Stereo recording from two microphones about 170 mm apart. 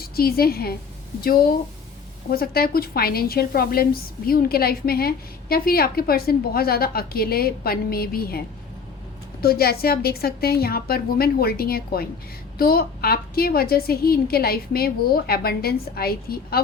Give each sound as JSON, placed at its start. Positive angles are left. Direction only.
{"t": 0.0, "sound": "a woman's voice", "side_deg": 60}